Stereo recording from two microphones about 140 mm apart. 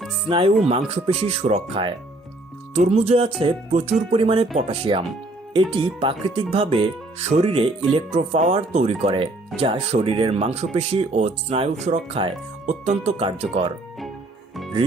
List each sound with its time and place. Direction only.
0.3 s speech: 40° right (ahead or behind)
2.7 s speech: 50° right (ahead or behind)
4.1 s speech: 40° right (ahead or behind)
12.6 s speech: 60° right (ahead or behind)
13.1 s speech: 45° right (ahead or behind)